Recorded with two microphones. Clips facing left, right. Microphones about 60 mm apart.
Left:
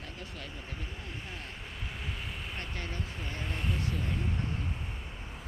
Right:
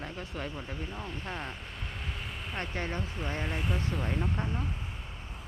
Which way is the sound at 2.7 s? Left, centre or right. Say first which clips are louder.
Right 6 dB; right.